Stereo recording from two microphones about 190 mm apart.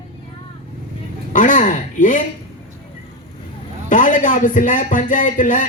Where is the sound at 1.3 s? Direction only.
45° left (ahead or behind).